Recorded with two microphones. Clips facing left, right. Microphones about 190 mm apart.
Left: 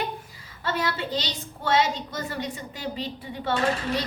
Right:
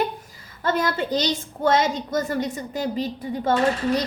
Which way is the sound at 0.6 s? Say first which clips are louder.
Right 5 dB; 45° right (ahead or behind).